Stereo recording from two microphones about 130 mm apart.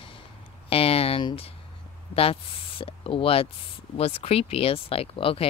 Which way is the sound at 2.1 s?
45° left (ahead or behind).